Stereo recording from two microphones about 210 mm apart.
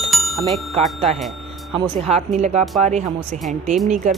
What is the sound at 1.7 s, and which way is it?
Speech, 25° right (ahead or behind).